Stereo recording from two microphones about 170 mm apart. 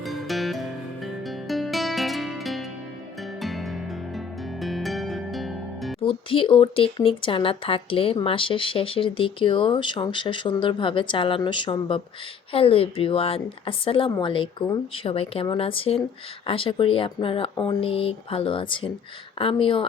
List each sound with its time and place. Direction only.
0.0 s music: centre (ahead or behind)
6.0 s speech: 30° left (ahead or behind)